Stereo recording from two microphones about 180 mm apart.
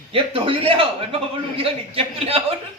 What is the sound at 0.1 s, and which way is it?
A man's voice, 30° right (ahead or behind).